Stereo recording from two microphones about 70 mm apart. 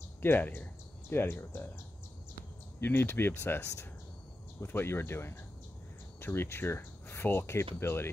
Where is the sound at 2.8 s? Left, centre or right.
Left.